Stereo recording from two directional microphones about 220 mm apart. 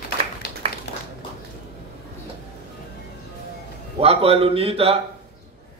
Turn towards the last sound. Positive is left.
turn(degrees=-25)  # may be behind; listen again after turning